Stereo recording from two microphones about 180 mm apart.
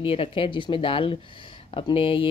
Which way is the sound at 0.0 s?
30° left (ahead or behind).